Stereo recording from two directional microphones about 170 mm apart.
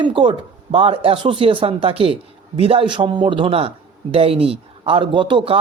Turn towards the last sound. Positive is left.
turn(degrees=-30)  # may be behind; listen again after turning